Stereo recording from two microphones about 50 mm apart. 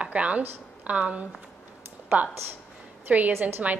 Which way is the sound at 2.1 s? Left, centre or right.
Right.